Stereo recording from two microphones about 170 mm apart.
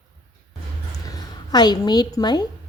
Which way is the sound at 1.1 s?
25° left (ahead or behind).